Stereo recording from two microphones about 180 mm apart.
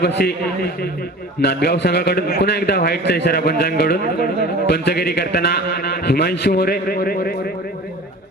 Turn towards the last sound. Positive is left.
turn(degrees=55)  # may be behind; listen again after turning